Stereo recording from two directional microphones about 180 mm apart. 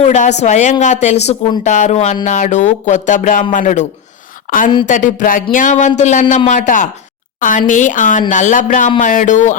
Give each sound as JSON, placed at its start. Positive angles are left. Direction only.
{"t": 0.0, "sound": "a woman's voice", "side_deg": 40}